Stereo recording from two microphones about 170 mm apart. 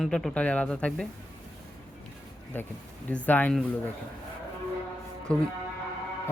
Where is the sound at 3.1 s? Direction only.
10° left (ahead or behind).